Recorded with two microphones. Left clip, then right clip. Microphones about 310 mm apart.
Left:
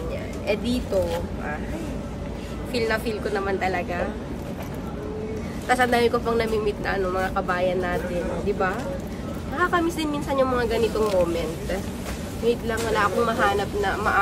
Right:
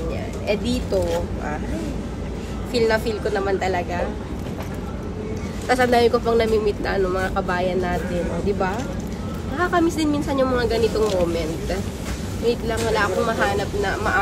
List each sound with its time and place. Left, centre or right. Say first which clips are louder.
2.7 s a woman's voice: right 5 dB; centre
5.7 s speech: right 3 dB; centre
9.6 s speech: right 3 dB; centre
12.4 s speech: right 2 dB; centre